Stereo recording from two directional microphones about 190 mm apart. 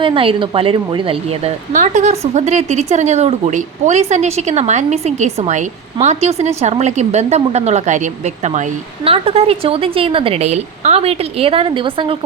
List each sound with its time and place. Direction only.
0.0 s speech: 30° right (ahead or behind)